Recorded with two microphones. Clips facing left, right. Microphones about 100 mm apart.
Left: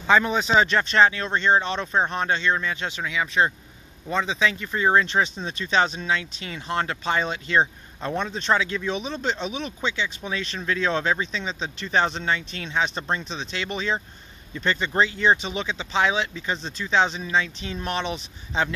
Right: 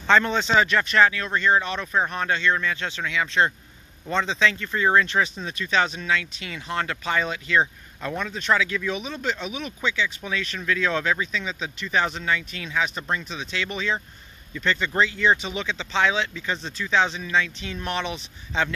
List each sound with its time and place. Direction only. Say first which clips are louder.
0.0 s speech: even; 10° left (ahead or behind)
0.7 s speech: left 1 dB; 25° left (ahead or behind)